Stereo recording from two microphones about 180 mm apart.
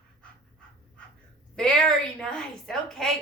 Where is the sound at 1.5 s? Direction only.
5° left (ahead or behind).